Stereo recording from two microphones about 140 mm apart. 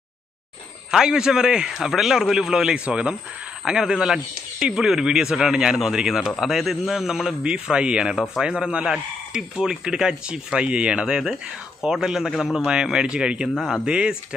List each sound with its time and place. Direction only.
0.9 s speech: 5° right (ahead or behind)